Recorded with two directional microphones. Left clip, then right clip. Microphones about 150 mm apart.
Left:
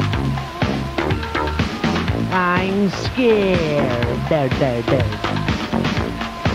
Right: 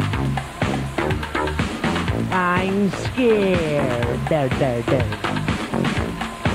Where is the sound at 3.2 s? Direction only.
30° right (ahead or behind).